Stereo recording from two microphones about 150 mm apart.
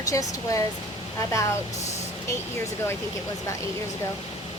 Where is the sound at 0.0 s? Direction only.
20° left (ahead or behind).